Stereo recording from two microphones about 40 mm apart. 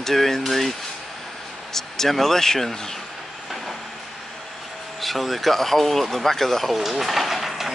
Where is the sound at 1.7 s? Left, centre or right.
Centre.